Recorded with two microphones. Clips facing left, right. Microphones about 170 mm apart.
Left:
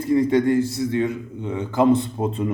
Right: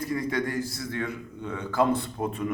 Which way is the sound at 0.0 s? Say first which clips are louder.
Left 10 dB; 25° left (ahead or behind).